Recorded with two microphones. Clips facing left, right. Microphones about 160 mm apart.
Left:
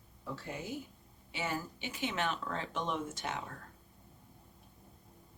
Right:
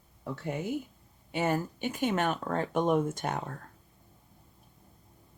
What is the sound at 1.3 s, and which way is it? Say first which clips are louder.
Speech: right 9 dB; 55° right (ahead or behind).